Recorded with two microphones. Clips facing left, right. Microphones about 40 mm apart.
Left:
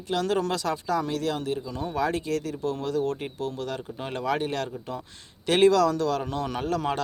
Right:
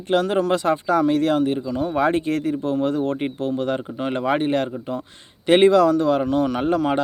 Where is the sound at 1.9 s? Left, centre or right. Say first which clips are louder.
Right 6 dB; right.